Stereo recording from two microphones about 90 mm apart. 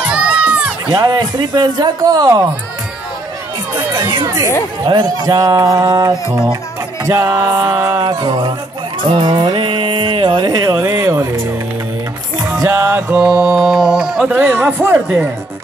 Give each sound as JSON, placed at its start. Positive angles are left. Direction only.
{"t": 0.0, "sound": "music", "side_deg": -10}
{"t": 0.8, "sound": "speech", "side_deg": -50}
{"t": 3.9, "sound": "speech", "side_deg": -50}
{"t": 7.1, "sound": "music", "side_deg": -35}
{"t": 8.0, "sound": "speech", "side_deg": -50}
{"t": 9.2, "sound": "music", "side_deg": -60}
{"t": 12.6, "sound": "speech", "side_deg": -25}
{"t": 13.2, "sound": "mantra", "side_deg": -5}
{"t": 14.2, "sound": "speech", "side_deg": -20}